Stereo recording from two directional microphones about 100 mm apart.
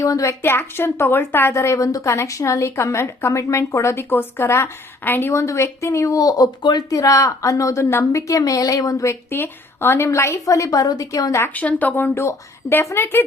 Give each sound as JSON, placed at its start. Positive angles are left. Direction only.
{"t": 0.0, "sound": "a woman's voice", "side_deg": 35}
{"t": 9.3, "sound": "a woman's voice", "side_deg": 20}